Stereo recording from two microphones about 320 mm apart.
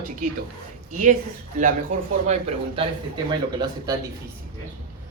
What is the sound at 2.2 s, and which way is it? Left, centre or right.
Speech, right.